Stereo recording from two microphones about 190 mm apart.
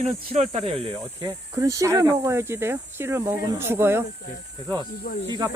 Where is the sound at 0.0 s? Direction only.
35° right (ahead or behind); by 4.0 s 10° right (ahead or behind).